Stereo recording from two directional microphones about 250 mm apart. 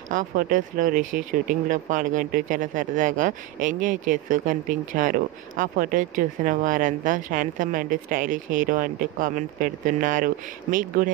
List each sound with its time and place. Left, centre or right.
0.1 s speech: right